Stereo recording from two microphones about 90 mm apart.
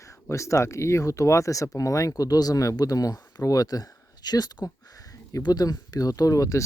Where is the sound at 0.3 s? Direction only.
35° left (ahead or behind).